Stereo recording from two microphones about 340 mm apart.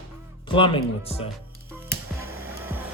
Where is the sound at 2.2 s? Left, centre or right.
Centre.